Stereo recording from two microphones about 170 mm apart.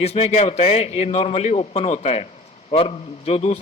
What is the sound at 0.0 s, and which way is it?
A man's voice, 40° left (ahead or behind).